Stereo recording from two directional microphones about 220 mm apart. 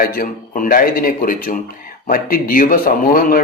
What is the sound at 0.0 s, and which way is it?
Speech, 40° left (ahead or behind).